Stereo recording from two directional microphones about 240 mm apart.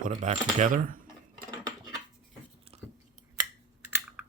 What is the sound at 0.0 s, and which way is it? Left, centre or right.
Speech, right.